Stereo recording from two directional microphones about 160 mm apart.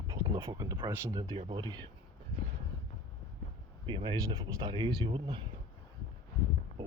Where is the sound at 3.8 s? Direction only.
30° right (ahead or behind).